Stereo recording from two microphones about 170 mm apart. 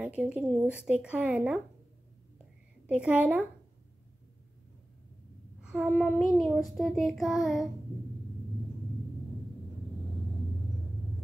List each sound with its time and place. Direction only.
0.0 s speech: 5° right (ahead or behind)
2.9 s speech: 5° right (ahead or behind)
5.6 s child singing: 5° right (ahead or behind)